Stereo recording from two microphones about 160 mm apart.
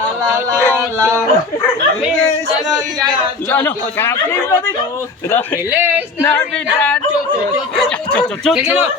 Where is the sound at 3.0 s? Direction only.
10° left (ahead or behind).